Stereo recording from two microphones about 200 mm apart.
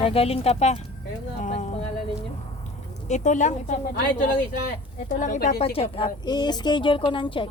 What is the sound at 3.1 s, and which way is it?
A woman's voice, 40° left (ahead or behind).